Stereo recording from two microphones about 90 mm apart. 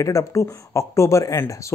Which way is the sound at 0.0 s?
35° left (ahead or behind).